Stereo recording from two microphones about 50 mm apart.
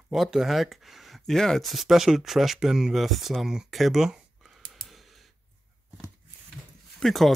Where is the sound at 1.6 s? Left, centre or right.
Centre.